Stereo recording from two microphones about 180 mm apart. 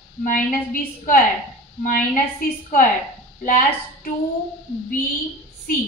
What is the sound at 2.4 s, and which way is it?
A woman's voice, 50° left (ahead or behind).